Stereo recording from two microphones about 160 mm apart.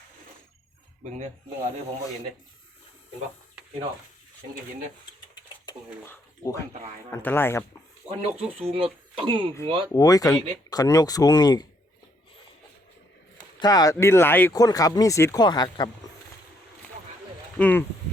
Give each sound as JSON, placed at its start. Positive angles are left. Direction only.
{"t": 5.7, "sound": "a sound", "side_deg": 25}
{"t": 6.1, "sound": "speech", "side_deg": 20}
{"t": 8.5, "sound": "speech", "side_deg": -35}
{"t": 9.9, "sound": "speech", "side_deg": 20}
{"t": 13.6, "sound": "speech", "side_deg": 25}
{"t": 17.6, "sound": "speech", "side_deg": 10}